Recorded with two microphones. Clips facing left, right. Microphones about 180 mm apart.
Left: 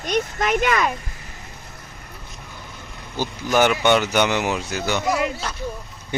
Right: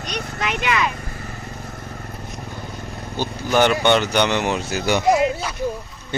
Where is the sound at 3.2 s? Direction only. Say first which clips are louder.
Right 1 dB; 10° left (ahead or behind).